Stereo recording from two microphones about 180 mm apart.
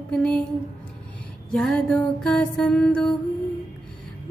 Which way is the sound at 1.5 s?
5° left (ahead or behind).